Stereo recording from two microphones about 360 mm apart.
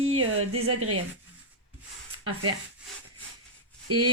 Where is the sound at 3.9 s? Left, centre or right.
Right.